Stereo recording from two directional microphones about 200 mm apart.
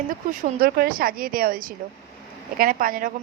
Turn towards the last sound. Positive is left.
turn(degrees=-45)  # may be behind; listen again after turning